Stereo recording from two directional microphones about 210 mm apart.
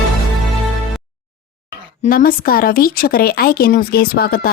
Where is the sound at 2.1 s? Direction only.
45° left (ahead or behind).